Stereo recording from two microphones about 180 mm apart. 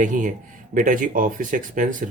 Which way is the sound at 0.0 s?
45° right (ahead or behind).